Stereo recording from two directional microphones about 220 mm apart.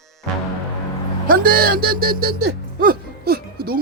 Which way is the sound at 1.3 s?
40° right (ahead or behind).